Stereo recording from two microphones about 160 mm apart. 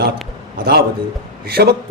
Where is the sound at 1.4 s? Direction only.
80° right.